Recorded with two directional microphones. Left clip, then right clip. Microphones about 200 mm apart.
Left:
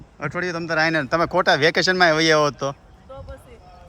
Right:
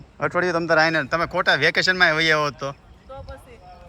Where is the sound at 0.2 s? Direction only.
Centre (ahead or behind); by 2.7 s 20° left (ahead or behind).